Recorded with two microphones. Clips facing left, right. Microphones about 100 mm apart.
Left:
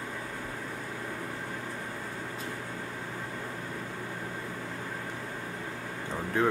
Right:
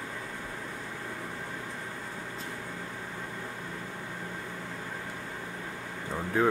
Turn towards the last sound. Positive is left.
turn(degrees=0)  # may be behind; listen again after turning